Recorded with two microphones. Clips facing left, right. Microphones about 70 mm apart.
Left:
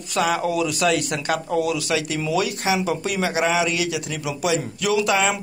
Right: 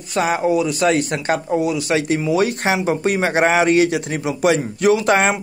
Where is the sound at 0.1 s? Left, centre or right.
Right.